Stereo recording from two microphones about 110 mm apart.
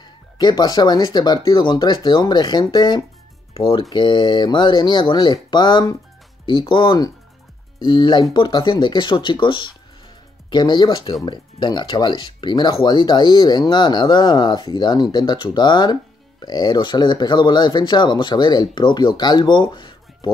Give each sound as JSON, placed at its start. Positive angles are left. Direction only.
{"t": 0.0, "sound": "speech", "side_deg": 40}
{"t": 3.5, "sound": "speech", "side_deg": 55}
{"t": 3.9, "sound": "speech", "side_deg": 45}
{"t": 7.8, "sound": "speech", "side_deg": 40}